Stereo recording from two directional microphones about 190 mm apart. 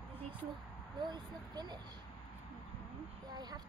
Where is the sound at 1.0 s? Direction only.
20° right (ahead or behind).